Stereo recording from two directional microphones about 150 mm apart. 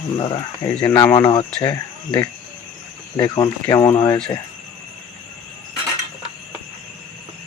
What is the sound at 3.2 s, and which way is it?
Speech, 30° left (ahead or behind).